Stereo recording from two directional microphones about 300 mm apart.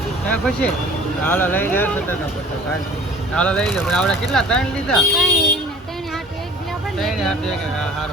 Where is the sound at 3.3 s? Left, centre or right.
Centre.